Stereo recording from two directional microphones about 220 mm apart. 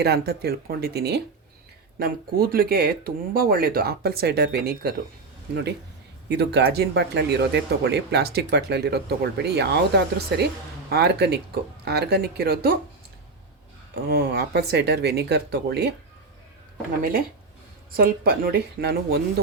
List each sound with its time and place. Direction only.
0.0 s speech: 45° right (ahead or behind)
6.2 s speech: 50° right (ahead or behind)
14.1 s speech: 45° right (ahead or behind)
17.0 s speech: 40° right (ahead or behind)